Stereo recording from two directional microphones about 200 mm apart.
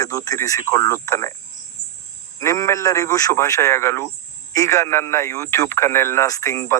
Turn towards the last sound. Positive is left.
turn(degrees=15)  # may be behind; listen again after turning